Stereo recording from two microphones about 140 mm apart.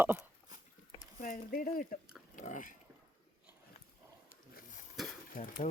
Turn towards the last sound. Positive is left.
turn(degrees=70)  # may be behind; listen again after turning